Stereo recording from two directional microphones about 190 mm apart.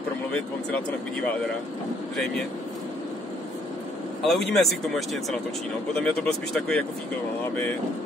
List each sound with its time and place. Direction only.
4.2 s speech: centre (ahead or behind)